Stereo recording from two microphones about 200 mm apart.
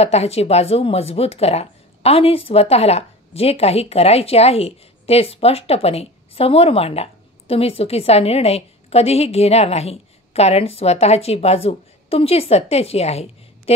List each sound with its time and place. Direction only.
0.0 s speech: 30° left (ahead or behind)